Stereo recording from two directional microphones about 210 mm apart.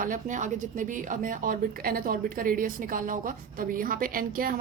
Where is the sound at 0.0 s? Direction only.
40° right (ahead or behind).